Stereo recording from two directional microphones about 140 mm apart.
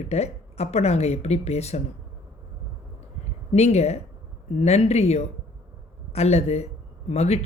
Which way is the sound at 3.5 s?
50° left (ahead or behind).